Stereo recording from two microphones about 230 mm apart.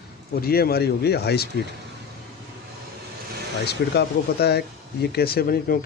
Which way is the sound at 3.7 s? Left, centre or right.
Left.